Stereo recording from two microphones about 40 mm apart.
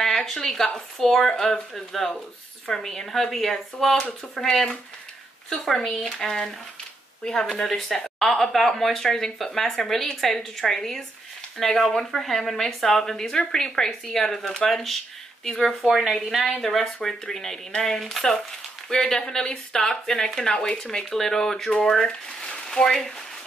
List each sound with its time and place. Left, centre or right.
0.0 s speech: centre
5.9 s speech: centre
7.5 s a woman's voice: centre
15.9 s a woman's voice: centre
20.4 s speech: left